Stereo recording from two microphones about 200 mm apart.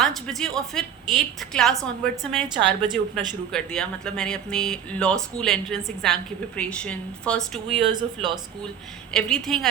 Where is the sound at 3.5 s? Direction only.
5° left (ahead or behind).